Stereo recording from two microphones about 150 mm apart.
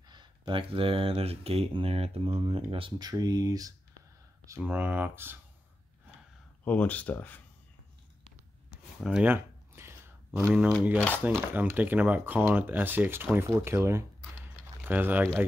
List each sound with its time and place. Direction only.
0.1 s speech: 30° right (ahead or behind)
4.6 s speech: 10° right (ahead or behind)
6.6 s speech: 10° left (ahead or behind)
9.0 s a sound: 5° right (ahead or behind)
10.3 s speech: 5° right (ahead or behind)
13.7 s a sound: 15° right (ahead or behind)